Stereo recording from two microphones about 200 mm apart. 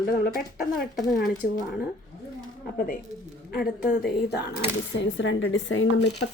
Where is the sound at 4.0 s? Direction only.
55° left (ahead or behind).